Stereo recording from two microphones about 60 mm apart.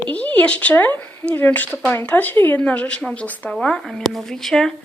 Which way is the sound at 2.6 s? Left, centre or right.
Left.